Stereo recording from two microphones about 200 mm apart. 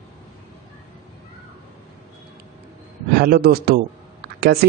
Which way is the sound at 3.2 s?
50° right (ahead or behind).